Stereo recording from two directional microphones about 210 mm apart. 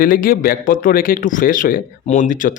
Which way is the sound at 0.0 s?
40° left (ahead or behind).